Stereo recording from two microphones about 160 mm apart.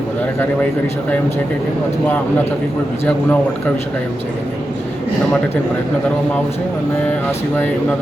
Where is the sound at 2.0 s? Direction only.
15° left (ahead or behind).